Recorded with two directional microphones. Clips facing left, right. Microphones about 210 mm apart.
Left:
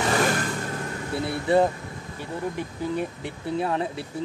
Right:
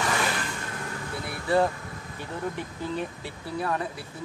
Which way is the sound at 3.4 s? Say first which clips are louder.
Left 4 dB; 25° left (ahead or behind).